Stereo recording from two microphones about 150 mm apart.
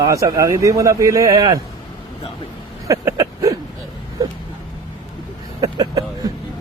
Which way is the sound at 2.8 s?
20° right (ahead or behind).